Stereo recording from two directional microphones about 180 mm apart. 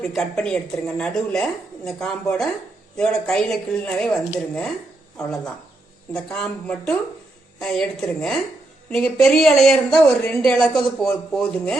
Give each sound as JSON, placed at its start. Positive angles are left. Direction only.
{"t": 0.1, "sound": "a woman's voice", "side_deg": 5}
{"t": 6.1, "sound": "a woman's voice", "side_deg": 5}